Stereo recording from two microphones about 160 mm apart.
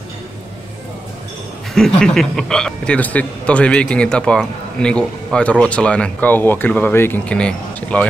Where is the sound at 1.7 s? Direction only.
5° left (ahead or behind).